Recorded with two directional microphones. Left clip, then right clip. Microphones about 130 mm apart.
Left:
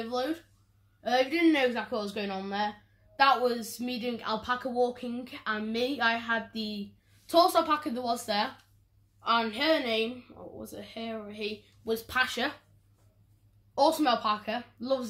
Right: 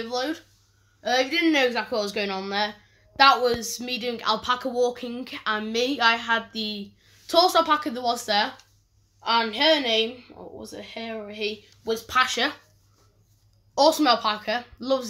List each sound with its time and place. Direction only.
0.1 s speech: 25° right (ahead or behind)
1.7 s speech: 45° right (ahead or behind)
3.2 s speech: 30° right (ahead or behind)
13.7 s speech: 40° right (ahead or behind)